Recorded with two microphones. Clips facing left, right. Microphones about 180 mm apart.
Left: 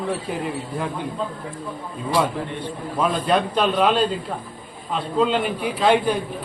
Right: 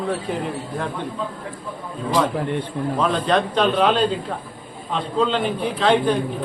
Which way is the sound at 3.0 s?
10° left (ahead or behind).